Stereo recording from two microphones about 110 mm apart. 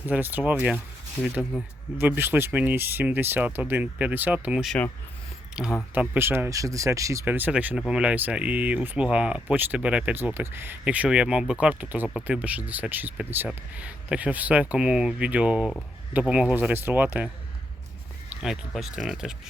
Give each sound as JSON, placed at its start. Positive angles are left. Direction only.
{"t": 0.1, "sound": "speech", "side_deg": -15}
{"t": 1.2, "sound": "speech", "side_deg": -5}
{"t": 2.0, "sound": "speech", "side_deg": -20}
{"t": 7.3, "sound": "speech", "side_deg": -15}
{"t": 18.3, "sound": "speech", "side_deg": -5}